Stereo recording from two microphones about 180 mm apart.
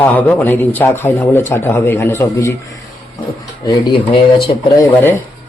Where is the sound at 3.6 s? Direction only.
25° left (ahead or behind).